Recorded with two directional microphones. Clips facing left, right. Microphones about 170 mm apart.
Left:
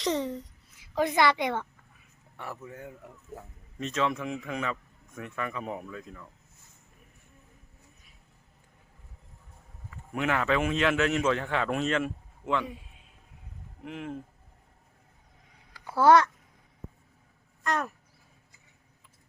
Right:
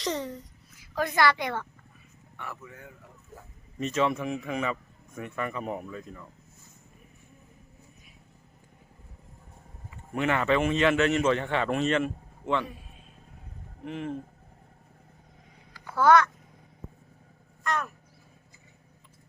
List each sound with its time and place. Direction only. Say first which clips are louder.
0.0 s a woman's voice: left 3 dB; 20° left (ahead or behind)
2.4 s speech: left 2 dB; 40° left (ahead or behind)
3.8 s a man's voice: right 3 dB; 5° right (ahead or behind)
10.2 s a man's voice: right 2 dB; centre (ahead or behind)
13.8 s a man's voice: right 3 dB; 5° left (ahead or behind)
16.0 s speech: left 1 dB; 30° left (ahead or behind)
17.6 s a sound: left 1 dB; 35° left (ahead or behind)